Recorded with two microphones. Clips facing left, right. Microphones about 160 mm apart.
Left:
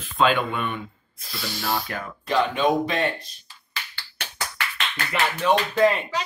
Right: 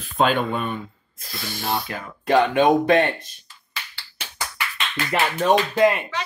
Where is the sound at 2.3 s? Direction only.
55° right (ahead or behind).